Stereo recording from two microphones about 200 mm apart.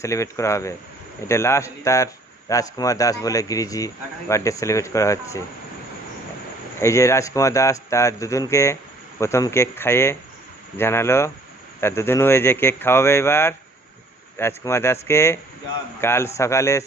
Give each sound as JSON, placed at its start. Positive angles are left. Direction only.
{"t": 0.0, "sound": "speech", "side_deg": 15}
{"t": 6.7, "sound": "speech", "side_deg": 15}